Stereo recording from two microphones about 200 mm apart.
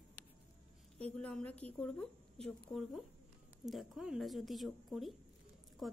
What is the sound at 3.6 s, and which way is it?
A woman's voice, centre (ahead or behind).